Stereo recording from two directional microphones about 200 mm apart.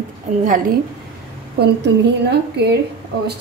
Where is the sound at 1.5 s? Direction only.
60° right (ahead or behind).